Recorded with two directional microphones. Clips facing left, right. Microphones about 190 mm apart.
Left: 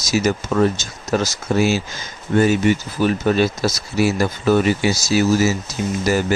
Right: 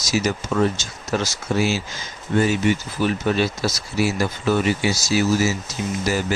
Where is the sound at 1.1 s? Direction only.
45° left (ahead or behind).